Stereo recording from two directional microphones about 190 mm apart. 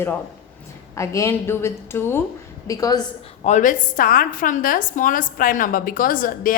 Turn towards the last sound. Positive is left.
turn(degrees=45)  # may be behind; listen again after turning